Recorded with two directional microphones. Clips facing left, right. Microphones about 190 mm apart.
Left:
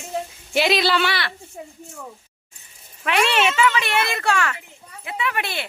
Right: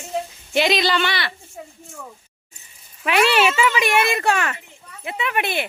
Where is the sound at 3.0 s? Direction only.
5° right (ahead or behind); by 5.6 s 20° right (ahead or behind).